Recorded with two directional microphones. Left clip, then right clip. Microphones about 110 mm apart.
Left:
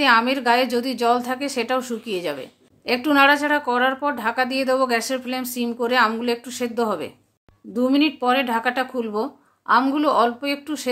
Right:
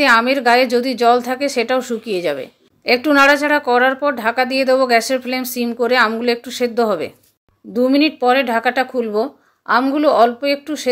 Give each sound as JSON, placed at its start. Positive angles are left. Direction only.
{"t": 0.0, "sound": "a woman's voice", "side_deg": -40}